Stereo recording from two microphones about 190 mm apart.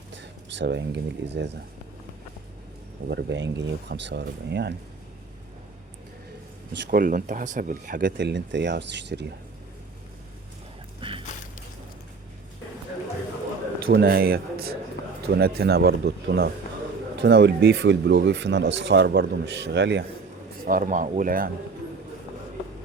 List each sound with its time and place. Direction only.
0.2 s speech: 70° right (ahead or behind)
3.1 s speech: 65° right (ahead or behind)
6.9 s speech: 45° right (ahead or behind)
8.2 s speech: 65° right (ahead or behind)
11.0 s music: 25° right (ahead or behind)
13.7 s a man's voice: 55° right (ahead or behind)
20.7 s speech: 45° right (ahead or behind)